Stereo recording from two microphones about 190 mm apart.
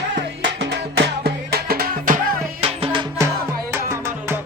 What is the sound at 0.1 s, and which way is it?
Music, 75° right (ahead or behind).